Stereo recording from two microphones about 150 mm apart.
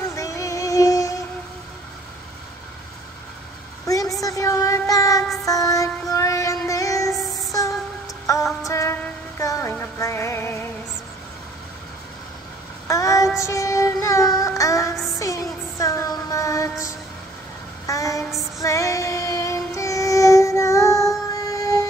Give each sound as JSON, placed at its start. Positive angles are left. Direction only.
{"t": 0.1, "sound": "music", "side_deg": 20}
{"t": 3.8, "sound": "child singing", "side_deg": 25}
{"t": 8.3, "sound": "music", "side_deg": 20}
{"t": 12.8, "sound": "child singing", "side_deg": 20}
{"t": 13.4, "sound": "music", "side_deg": 20}
{"t": 17.8, "sound": "a sound", "side_deg": 20}
{"t": 18.6, "sound": "music", "side_deg": 20}